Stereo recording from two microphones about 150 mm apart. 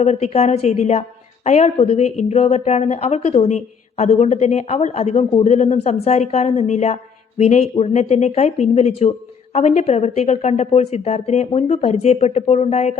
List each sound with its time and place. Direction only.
0.0 s speech: 45° left (ahead or behind)